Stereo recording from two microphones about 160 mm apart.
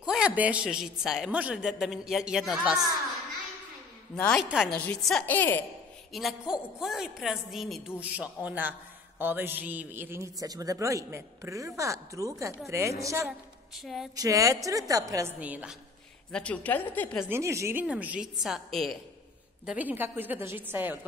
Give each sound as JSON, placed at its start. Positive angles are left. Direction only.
{"t": 0.0, "sound": "a man's voice", "side_deg": -5}
{"t": 4.2, "sound": "a man's voice", "side_deg": 5}
{"t": 6.1, "sound": "a man's voice", "side_deg": 0}
{"t": 13.7, "sound": "a man's voice", "side_deg": 0}
{"t": 14.1, "sound": "a man's voice", "side_deg": -20}
{"t": 15.4, "sound": "a woman's voice", "side_deg": -10}
{"t": 16.3, "sound": "a woman's voice", "side_deg": 5}
{"t": 17.3, "sound": "a woman's voice", "side_deg": -20}